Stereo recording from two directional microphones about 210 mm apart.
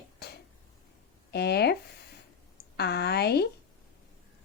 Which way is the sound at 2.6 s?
50° left (ahead or behind).